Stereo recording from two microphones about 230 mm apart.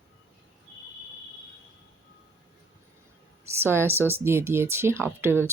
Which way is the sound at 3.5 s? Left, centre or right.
Centre.